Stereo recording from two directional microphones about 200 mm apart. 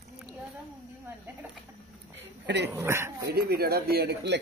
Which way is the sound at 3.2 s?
50° right (ahead or behind).